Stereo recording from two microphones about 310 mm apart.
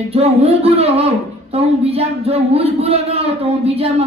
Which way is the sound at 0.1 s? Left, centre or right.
Centre.